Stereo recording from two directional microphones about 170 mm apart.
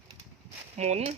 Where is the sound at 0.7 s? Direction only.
40° right (ahead or behind).